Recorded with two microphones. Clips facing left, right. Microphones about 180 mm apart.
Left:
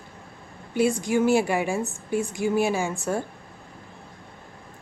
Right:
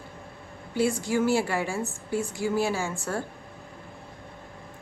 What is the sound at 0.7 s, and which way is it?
A woman's voice, 20° left (ahead or behind).